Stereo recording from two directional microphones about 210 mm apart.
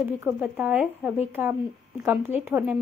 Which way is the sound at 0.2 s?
5° right (ahead or behind).